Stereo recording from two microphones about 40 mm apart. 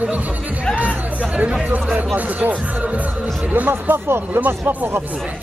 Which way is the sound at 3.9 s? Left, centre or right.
Right.